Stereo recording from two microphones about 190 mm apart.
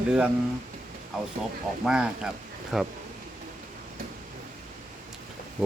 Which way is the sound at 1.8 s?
5° right (ahead or behind).